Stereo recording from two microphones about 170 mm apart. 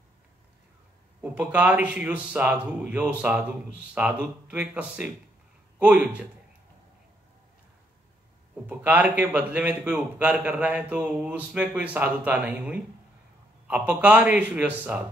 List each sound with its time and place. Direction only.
1.2 s a man's voice: 10° right (ahead or behind)
8.6 s a man's voice: 10° right (ahead or behind)